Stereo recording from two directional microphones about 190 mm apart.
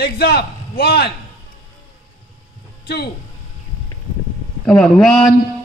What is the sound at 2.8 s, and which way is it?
Speech, 60° left (ahead or behind).